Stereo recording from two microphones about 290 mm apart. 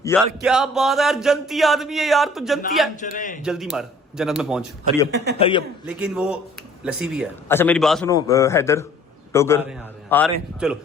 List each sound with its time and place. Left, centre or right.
0.0 s a sound: centre
0.4 s speech: centre
3.0 s a man's voice: left
3.4 s speech: centre
5.1 s a man's voice: right
5.4 s a man's voice: centre
5.8 s speech: centre
7.4 s a man's voice: centre